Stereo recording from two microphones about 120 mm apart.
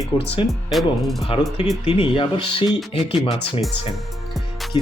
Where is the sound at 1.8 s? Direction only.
45° left (ahead or behind).